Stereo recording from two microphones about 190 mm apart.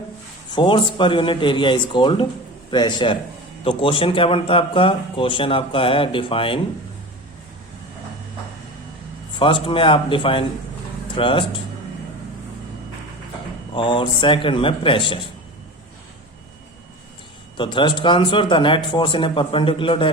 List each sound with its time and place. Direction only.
0.5 s a man's voice: 25° left (ahead or behind)
9.3 s a man's voice: 25° left (ahead or behind)
13.7 s a man's voice: 25° left (ahead or behind)
17.6 s a man's voice: 25° left (ahead or behind)